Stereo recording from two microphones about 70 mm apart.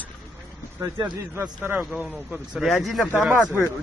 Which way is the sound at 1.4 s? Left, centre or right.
Right.